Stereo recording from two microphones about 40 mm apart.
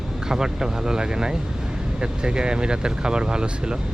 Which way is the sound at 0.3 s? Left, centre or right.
Centre.